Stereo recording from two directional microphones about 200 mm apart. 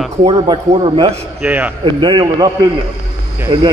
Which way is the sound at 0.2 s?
30° right (ahead or behind).